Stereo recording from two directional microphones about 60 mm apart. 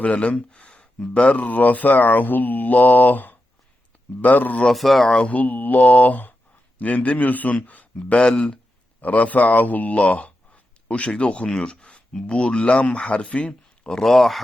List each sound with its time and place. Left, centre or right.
0.0 s speech: centre
4.6 s speech: centre
5.2 s speech: left
9.0 s speech: left
13.5 s speech: centre